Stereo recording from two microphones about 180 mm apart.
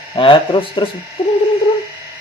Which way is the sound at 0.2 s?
30° left (ahead or behind).